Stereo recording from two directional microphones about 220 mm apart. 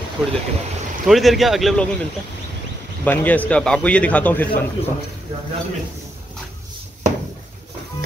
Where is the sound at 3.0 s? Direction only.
5° left (ahead or behind).